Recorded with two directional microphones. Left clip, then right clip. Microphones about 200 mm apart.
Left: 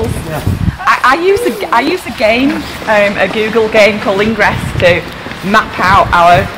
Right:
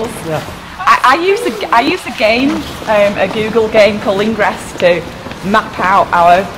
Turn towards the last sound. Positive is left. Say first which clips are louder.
# left 2 dB
turn(degrees=5)  # may be behind; listen again after turning